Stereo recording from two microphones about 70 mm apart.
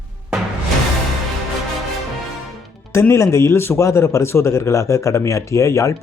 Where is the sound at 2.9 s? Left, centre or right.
Left.